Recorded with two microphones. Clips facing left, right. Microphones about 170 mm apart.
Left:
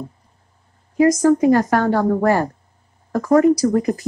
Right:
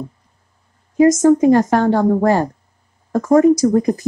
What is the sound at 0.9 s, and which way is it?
Speech, 20° right (ahead or behind).